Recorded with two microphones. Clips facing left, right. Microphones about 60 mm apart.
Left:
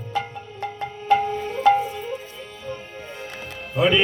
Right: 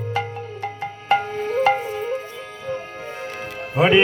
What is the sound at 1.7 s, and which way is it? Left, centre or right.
Music, right.